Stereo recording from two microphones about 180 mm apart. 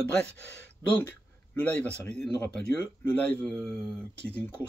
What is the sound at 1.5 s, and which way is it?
Speech, 10° left (ahead or behind).